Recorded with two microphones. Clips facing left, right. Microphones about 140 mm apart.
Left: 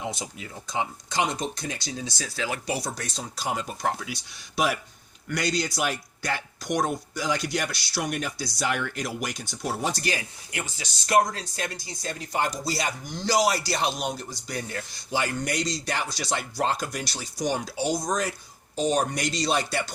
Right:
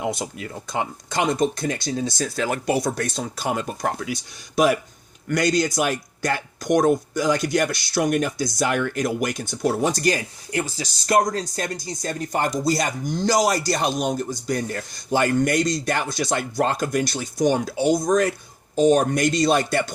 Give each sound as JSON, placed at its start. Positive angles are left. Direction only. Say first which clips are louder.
{"t": 0.0, "sound": "a man's voice", "louder": "right 7 dB", "side_deg": -55}